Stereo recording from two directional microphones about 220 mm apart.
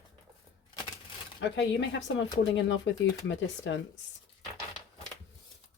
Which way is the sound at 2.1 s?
55° left (ahead or behind).